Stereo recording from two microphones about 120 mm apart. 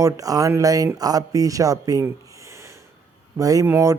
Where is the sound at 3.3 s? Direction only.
30° right (ahead or behind).